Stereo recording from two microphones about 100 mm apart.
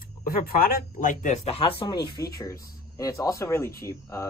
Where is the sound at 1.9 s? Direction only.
40° left (ahead or behind).